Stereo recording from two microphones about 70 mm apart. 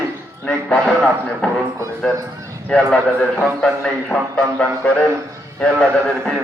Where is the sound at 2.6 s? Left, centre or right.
Centre.